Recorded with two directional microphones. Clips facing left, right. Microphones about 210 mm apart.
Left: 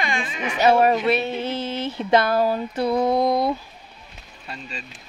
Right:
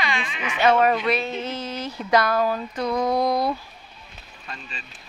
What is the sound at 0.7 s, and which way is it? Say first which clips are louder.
Speech: left 2 dB; 30° left (ahead or behind).